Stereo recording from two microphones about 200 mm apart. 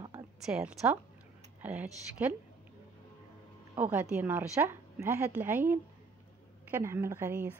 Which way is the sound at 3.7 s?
10° right (ahead or behind).